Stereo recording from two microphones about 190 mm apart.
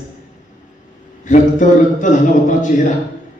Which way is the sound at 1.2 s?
40° left (ahead or behind).